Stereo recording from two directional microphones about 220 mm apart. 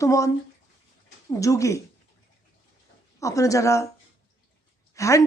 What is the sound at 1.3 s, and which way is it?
Speech, 15° left (ahead or behind).